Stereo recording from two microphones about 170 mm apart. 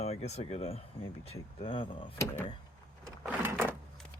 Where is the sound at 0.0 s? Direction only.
40° left (ahead or behind).